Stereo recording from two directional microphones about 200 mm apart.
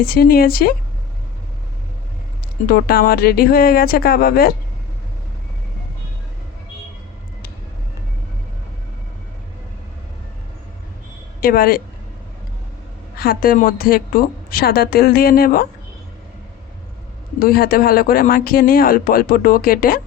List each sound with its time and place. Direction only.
0.0 s speech: 45° left (ahead or behind)
2.6 s speech: 50° left (ahead or behind)
11.3 s speech: 45° left (ahead or behind)
13.1 s speech: 45° left (ahead or behind)
17.4 s speech: 50° left (ahead or behind)